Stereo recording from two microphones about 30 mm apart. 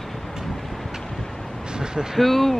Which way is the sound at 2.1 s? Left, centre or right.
Centre.